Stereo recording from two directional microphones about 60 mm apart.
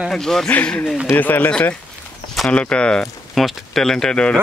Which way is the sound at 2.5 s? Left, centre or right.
Centre.